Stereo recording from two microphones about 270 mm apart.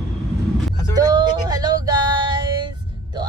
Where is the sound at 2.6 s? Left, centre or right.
Centre.